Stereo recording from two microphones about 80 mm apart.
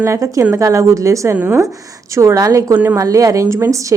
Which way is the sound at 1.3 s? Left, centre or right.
Right.